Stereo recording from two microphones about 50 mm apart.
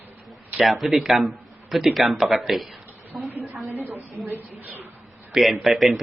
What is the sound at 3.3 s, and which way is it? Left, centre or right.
Speech, right.